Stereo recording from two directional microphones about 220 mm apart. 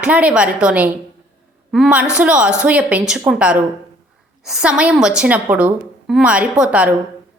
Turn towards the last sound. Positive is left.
turn(degrees=-5)  # may be behind; listen again after turning